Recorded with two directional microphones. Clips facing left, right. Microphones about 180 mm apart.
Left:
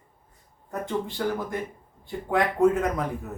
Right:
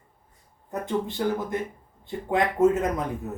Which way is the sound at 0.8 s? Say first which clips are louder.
Right 2 dB; 20° right (ahead or behind).